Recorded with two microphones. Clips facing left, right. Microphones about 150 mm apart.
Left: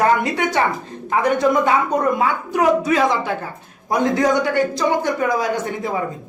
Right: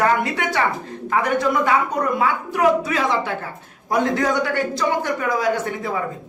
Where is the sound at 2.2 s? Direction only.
20° left (ahead or behind).